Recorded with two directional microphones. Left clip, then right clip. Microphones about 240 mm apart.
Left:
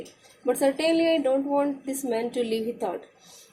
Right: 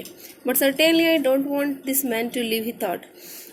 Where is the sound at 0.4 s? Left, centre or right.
Right.